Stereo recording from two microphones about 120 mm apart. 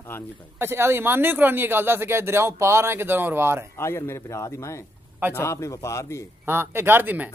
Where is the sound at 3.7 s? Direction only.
20° left (ahead or behind).